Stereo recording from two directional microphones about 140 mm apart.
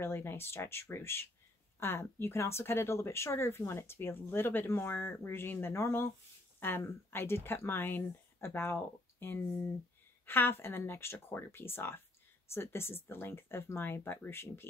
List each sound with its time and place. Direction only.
0.0 s speech: 15° left (ahead or behind)